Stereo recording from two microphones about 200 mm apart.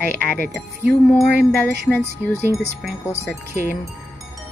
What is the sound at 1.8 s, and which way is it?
Speech, 10° left (ahead or behind).